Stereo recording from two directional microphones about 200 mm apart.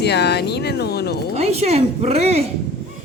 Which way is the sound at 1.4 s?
30° right (ahead or behind).